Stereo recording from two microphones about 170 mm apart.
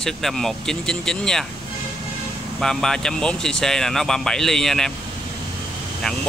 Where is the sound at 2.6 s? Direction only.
5° left (ahead or behind).